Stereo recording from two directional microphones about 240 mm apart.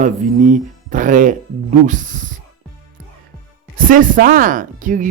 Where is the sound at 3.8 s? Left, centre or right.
Right.